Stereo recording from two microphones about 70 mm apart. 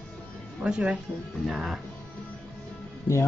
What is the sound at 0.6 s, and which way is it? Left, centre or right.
Speech, centre.